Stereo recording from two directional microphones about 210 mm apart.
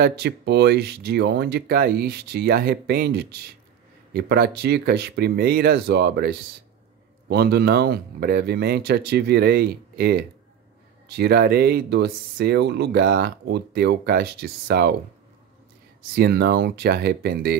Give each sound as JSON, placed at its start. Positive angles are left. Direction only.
{"t": 0.0, "sound": "speech", "side_deg": -50}
{"t": 16.2, "sound": "speech", "side_deg": -50}